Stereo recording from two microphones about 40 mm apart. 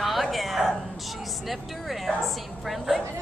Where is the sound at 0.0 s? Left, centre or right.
Centre.